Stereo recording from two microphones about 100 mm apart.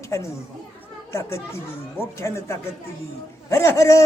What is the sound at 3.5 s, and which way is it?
Speech, 30° left (ahead or behind).